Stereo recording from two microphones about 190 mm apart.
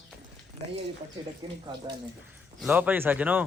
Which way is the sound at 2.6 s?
10° right (ahead or behind).